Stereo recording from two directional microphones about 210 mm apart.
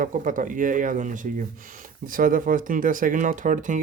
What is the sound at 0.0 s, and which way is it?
Speech, 40° right (ahead or behind).